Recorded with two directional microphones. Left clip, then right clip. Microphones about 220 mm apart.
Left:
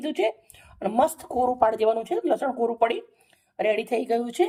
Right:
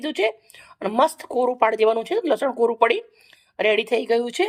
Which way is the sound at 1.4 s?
15° right (ahead or behind).